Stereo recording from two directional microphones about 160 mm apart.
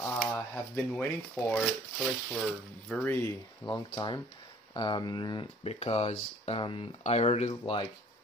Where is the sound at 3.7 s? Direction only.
30° left (ahead or behind).